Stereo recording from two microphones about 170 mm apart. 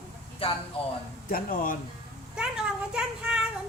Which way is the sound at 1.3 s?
55° left (ahead or behind).